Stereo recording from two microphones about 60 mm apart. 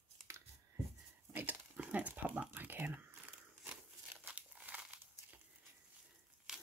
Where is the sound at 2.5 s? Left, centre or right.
Right.